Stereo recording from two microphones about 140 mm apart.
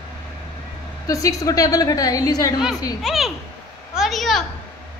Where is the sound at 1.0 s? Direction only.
25° left (ahead or behind).